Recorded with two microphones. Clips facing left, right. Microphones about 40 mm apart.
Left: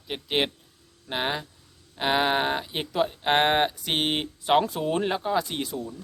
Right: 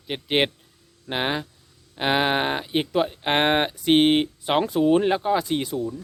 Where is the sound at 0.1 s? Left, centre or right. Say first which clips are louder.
Right 4 dB; right.